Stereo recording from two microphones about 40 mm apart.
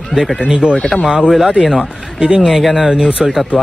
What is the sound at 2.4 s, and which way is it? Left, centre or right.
Speech, centre.